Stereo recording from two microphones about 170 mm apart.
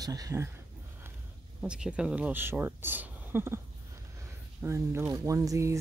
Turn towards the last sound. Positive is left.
turn(degrees=-20)  # may be behind; listen again after turning